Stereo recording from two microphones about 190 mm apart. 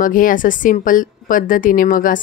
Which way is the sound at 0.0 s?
45° left (ahead or behind).